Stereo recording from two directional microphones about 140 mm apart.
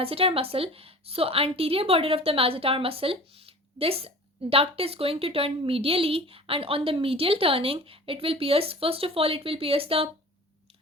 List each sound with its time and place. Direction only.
0.0 s a woman's voice: 45° right (ahead or behind)